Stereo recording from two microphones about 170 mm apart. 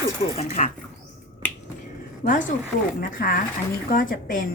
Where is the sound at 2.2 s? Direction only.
50° left (ahead or behind).